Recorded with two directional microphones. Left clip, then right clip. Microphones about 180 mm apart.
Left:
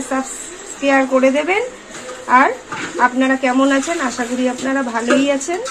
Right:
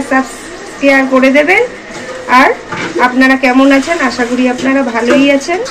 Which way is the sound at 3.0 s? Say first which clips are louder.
Right 6 dB; 50° left (ahead or behind).